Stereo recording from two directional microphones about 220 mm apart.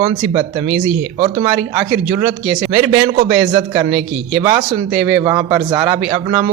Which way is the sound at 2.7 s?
25° right (ahead or behind).